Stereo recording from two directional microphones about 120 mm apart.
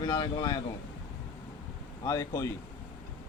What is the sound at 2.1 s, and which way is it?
Speech, 30° left (ahead or behind).